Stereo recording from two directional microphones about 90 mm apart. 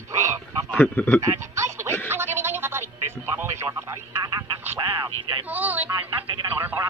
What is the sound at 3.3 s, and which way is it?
Radio, 30° right (ahead or behind).